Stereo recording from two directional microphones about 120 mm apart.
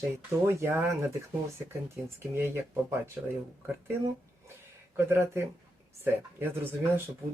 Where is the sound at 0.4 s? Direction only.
20° right (ahead or behind).